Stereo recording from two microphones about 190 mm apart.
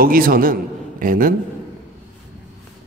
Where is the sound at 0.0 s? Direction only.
50° right (ahead or behind).